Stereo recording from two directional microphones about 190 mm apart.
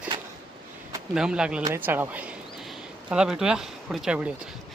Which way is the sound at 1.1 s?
5° right (ahead or behind).